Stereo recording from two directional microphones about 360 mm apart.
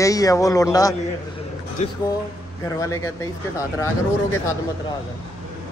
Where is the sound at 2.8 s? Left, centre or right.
Centre.